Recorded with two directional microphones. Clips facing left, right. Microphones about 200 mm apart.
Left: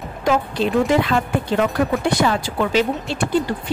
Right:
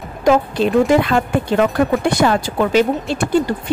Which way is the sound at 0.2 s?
50° right (ahead or behind).